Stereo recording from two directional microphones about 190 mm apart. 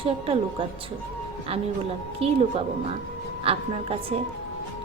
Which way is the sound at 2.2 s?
30° right (ahead or behind).